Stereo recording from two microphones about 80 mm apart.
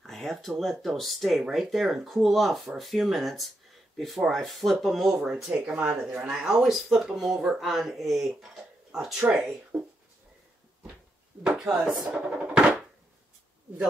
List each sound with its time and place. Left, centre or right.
0.0 s speech: centre
9.7 s speech: centre
11.4 s speech: centre
12.4 s music: centre